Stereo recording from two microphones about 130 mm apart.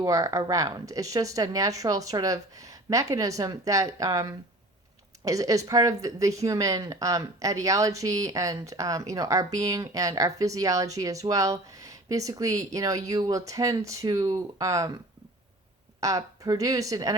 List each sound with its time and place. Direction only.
0.0 s speech: 25° right (ahead or behind)
16.0 s speech: 25° right (ahead or behind)